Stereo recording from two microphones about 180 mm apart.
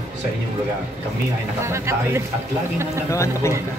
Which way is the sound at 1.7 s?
15° right (ahead or behind).